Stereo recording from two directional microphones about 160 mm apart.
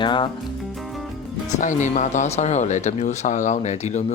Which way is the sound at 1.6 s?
50° left (ahead or behind).